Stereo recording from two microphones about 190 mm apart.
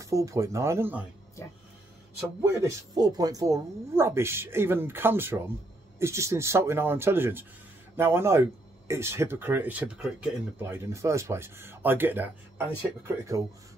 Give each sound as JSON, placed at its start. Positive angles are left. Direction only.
{"t": 0.0, "sound": "speech", "side_deg": -15}
{"t": 2.4, "sound": "speech", "side_deg": -15}